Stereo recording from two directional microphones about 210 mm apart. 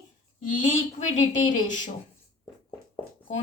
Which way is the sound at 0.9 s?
35° left (ahead or behind).